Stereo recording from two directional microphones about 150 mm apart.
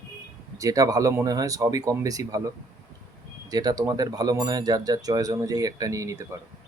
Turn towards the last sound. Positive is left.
turn(degrees=-20)  # may be behind; listen again after turning